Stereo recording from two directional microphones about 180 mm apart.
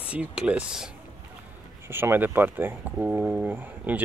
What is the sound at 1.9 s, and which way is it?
Speech, 10° right (ahead or behind).